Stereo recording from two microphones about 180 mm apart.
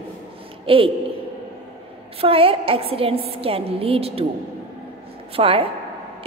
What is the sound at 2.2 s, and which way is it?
A woman's voice, 30° right (ahead or behind).